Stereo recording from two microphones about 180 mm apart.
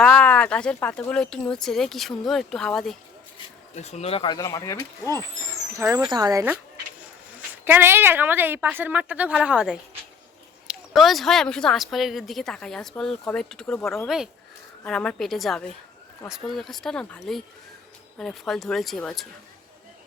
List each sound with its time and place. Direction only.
0.0 s a woman's voice: 5° left (ahead or behind)
3.8 s speech: 40° left (ahead or behind); by 5.1 s 15° left (ahead or behind)
5.7 s a woman's voice: 15° right (ahead or behind)
7.6 s a woman's voice: 10° right (ahead or behind)